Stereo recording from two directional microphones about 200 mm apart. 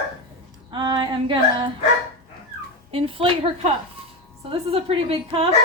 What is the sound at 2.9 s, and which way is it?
A woman's voice, 25° right (ahead or behind).